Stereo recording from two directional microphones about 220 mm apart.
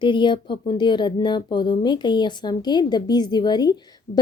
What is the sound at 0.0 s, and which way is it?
Speech, 20° left (ahead or behind).